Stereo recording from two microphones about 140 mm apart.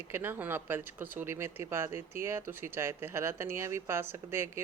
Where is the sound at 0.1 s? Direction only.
15° right (ahead or behind).